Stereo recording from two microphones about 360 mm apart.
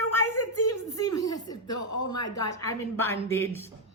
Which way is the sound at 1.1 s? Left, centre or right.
Centre.